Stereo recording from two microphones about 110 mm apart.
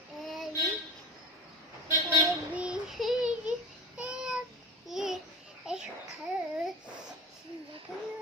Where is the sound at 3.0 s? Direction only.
5° right (ahead or behind).